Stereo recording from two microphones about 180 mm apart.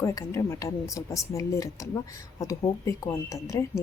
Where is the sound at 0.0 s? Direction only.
15° left (ahead or behind).